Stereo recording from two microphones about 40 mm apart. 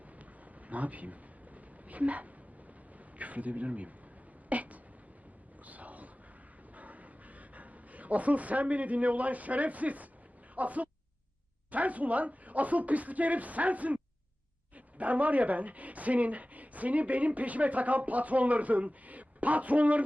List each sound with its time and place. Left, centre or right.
0.7 s speech: right
4.4 s a sound: right
10.5 s speech: right